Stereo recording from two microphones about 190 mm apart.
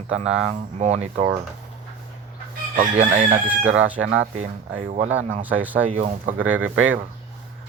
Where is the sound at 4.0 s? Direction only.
90° right.